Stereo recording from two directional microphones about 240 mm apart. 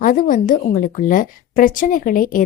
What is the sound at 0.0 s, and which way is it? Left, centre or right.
A woman's voice, left.